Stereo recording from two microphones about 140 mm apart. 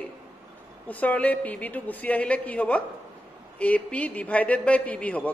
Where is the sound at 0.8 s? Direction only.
10° left (ahead or behind).